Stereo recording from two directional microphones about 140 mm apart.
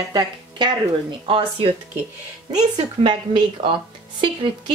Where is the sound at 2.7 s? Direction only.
35° right (ahead or behind).